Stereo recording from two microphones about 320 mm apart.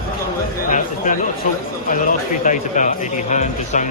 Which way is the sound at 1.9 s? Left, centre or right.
Left.